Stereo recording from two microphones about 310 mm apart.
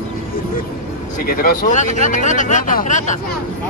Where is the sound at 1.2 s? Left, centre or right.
Left.